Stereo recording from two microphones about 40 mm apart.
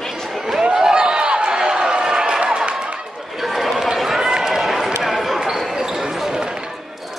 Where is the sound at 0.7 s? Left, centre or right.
Centre.